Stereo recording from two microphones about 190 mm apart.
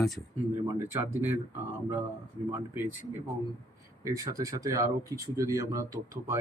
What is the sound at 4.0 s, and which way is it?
Speech, 15° right (ahead or behind).